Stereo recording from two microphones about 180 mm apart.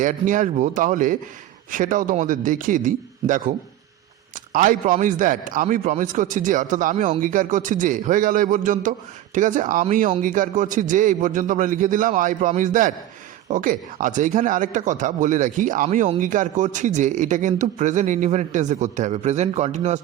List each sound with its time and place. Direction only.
0.0 s a man's voice: 45° right (ahead or behind)
4.5 s a man's voice: 50° right (ahead or behind)